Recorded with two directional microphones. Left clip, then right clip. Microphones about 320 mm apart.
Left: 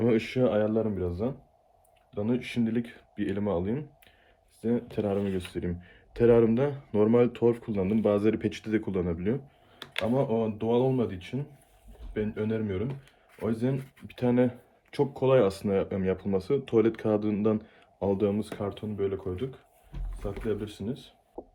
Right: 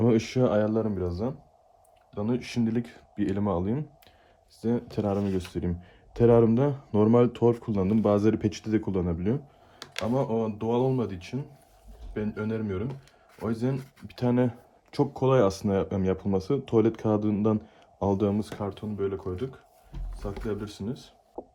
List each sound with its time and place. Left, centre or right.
0.0 s speech: centre
5.3 s speech: centre
5.5 s speech: right
20.5 s speech: right
21.4 s a sound: left